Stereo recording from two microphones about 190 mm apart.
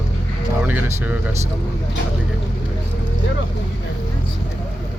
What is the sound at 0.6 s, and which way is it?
Speech, 10° right (ahead or behind).